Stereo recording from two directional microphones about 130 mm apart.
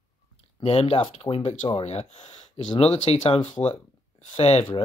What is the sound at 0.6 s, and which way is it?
Speech, 50° left (ahead or behind).